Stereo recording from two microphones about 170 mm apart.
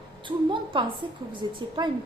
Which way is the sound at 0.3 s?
30° right (ahead or behind).